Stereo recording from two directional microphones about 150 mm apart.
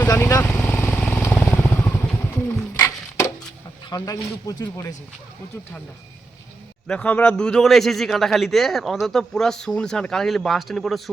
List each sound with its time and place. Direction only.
0.1 s vehicle: 20° left (ahead or behind)
0.4 s vehicle: 10° left (ahead or behind)
3.8 s a man's voice: 25° left (ahead or behind)
6.8 s speech: 10° left (ahead or behind)